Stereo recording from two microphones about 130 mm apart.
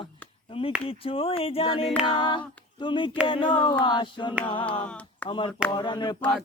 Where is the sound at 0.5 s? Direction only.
45° left (ahead or behind).